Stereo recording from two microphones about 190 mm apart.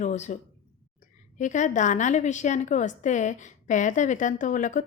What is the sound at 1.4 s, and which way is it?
A woman's voice, 40° left (ahead or behind).